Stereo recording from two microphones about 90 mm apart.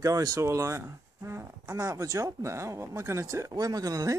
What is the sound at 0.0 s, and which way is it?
Speech, 40° right (ahead or behind).